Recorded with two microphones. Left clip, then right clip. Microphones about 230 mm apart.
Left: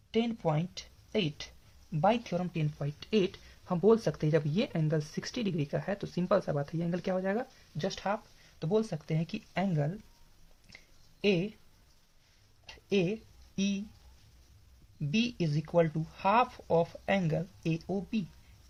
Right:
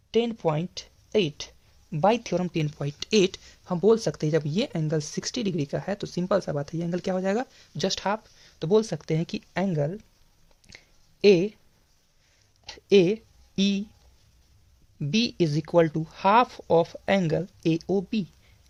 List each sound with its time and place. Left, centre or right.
0.1 s speech: right
3.7 s speech: right
11.2 s speech: right
12.6 s speech: right
14.9 s speech: right